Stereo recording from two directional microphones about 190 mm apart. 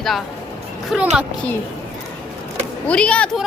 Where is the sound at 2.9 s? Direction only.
5° left (ahead or behind).